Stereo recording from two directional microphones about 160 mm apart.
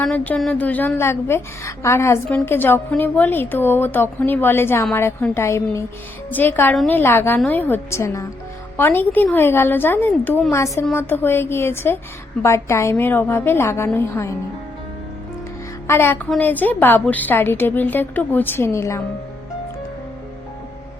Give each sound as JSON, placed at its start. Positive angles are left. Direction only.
{"t": 0.0, "sound": "a woman's voice", "side_deg": 5}
{"t": 15.9, "sound": "a woman's voice", "side_deg": 15}